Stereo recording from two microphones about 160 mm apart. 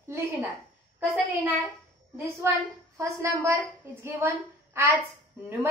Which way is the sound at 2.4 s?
15° right (ahead or behind).